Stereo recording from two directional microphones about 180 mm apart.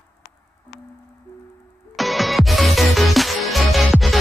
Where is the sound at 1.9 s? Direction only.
Centre (ahead or behind).